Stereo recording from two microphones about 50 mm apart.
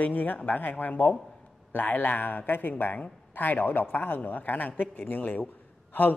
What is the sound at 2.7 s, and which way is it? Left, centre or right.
A man's voice, left.